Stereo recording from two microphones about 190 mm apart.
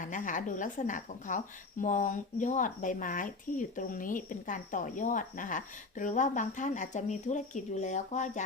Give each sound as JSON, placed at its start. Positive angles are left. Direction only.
{"t": 0.0, "sound": "a woman's voice", "side_deg": 40}